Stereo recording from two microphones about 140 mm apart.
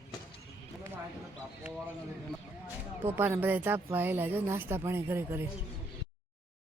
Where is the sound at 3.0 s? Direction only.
15° right (ahead or behind).